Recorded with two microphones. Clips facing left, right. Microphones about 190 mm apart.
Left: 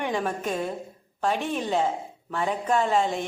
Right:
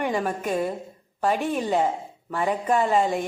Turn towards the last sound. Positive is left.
turn(degrees=-10)  # may be behind; listen again after turning